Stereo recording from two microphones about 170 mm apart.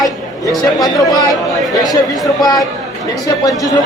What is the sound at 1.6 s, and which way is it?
Speech, centre (ahead or behind).